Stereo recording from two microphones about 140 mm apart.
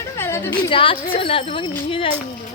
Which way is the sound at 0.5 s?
40° left (ahead or behind).